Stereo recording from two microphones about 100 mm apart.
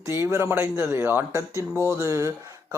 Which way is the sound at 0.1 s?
25° right (ahead or behind).